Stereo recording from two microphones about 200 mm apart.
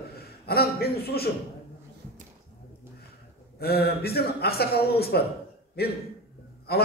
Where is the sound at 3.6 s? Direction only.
50° left (ahead or behind).